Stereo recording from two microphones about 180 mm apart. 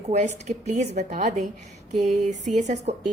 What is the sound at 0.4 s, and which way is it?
A woman's voice, 40° right (ahead or behind).